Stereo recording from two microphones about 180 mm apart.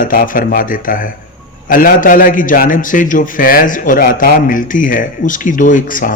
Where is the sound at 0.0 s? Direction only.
50° left (ahead or behind).